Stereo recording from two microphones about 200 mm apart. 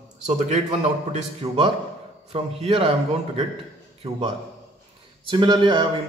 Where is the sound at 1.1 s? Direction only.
30° right (ahead or behind).